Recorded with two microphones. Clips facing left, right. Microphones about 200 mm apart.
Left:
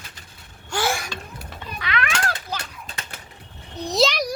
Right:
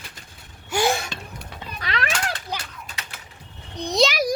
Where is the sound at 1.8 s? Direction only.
35° right (ahead or behind).